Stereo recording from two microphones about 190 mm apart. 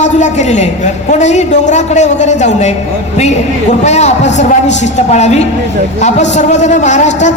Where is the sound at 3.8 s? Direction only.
35° left (ahead or behind).